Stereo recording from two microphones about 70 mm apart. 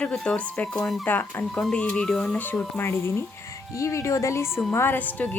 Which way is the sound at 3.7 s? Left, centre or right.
Left.